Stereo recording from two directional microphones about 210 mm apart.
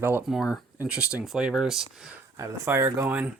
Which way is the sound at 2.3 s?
15° right (ahead or behind).